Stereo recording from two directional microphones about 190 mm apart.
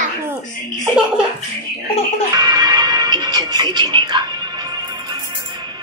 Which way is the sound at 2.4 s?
20° right (ahead or behind).